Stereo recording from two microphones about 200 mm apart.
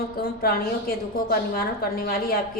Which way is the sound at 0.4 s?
50° left (ahead or behind).